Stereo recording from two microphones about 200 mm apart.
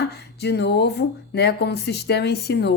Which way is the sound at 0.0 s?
55° left (ahead or behind).